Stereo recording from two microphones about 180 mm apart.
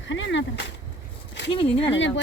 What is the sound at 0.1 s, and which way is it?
Speech, 90° left.